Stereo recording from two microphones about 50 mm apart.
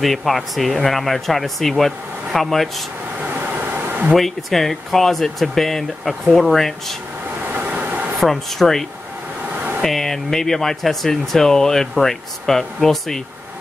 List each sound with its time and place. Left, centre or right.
0.0 s speech: centre
4.1 s speech: centre
7.5 s train: right
8.2 s speech: centre